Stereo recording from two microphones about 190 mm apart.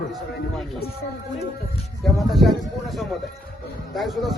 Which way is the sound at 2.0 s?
Centre (ahead or behind).